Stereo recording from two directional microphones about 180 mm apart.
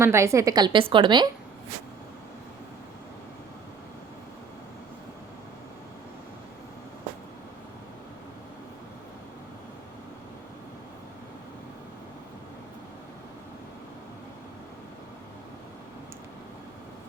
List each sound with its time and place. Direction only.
0.0 s a woman's voice: 15° right (ahead or behind)